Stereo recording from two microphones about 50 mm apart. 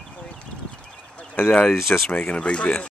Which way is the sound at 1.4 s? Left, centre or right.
Left.